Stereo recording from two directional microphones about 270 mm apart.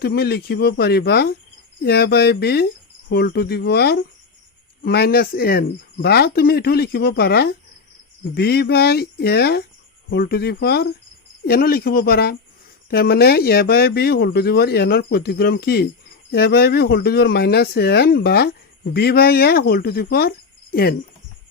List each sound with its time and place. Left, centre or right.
0.0 s speech: left